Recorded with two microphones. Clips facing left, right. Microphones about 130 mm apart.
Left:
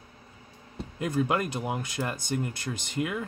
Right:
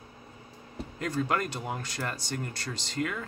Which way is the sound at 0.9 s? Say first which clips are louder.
Left 3 dB; 15° left (ahead or behind).